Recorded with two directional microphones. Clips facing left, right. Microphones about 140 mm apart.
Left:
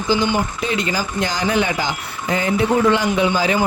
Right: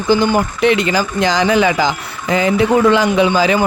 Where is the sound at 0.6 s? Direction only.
75° right (ahead or behind).